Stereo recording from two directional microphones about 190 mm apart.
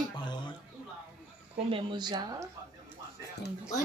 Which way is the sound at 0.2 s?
25° left (ahead or behind).